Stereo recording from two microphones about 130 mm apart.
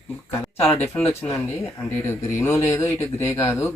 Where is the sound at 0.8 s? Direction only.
15° left (ahead or behind).